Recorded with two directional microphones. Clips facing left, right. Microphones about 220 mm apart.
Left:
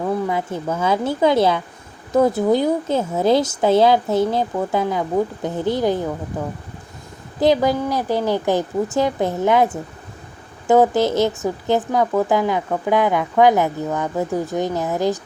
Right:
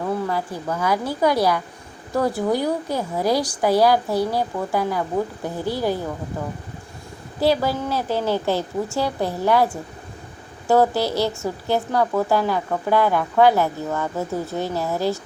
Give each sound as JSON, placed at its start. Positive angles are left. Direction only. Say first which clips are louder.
{"t": 0.3, "sound": "a woman's voice", "louder": "left 3 dB", "side_deg": 20}
{"t": 7.3, "sound": "a woman's voice", "louder": "left 4 dB", "side_deg": 20}